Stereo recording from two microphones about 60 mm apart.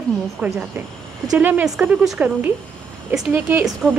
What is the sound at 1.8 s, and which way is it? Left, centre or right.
A woman's voice, right.